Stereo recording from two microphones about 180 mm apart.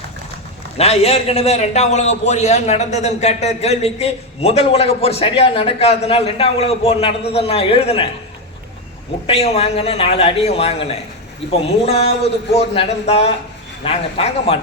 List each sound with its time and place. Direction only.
0.8 s a man's voice: 35° left (ahead or behind)
9.2 s a man's voice: 35° left (ahead or behind)
11.9 s a man's voice: 35° left (ahead or behind)